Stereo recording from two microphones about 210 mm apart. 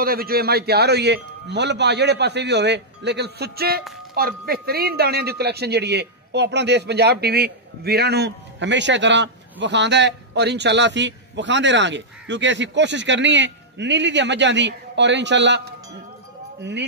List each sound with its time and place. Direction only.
0.0 s a man's voice: 45° right (ahead or behind)